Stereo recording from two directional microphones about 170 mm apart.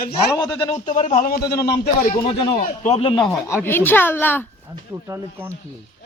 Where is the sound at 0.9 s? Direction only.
45° left (ahead or behind); by 2.1 s 70° left (ahead or behind).